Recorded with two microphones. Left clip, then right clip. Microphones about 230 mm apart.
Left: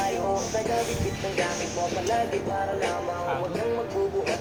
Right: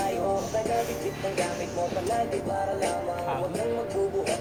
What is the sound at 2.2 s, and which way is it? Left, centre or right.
Music, right.